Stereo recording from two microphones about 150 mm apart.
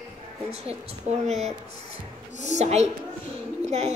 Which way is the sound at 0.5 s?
45° right (ahead or behind).